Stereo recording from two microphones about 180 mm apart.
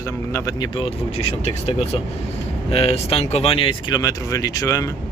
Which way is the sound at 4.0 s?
20° left (ahead or behind).